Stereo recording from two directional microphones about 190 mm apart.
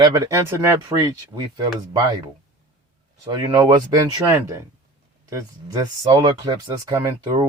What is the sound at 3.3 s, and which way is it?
Speech, 25° right (ahead or behind).